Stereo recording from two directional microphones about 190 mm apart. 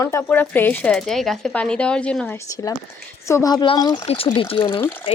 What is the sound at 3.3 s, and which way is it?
Speech, 15° left (ahead or behind).